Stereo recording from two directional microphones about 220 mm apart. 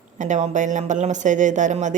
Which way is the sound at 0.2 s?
30° right (ahead or behind).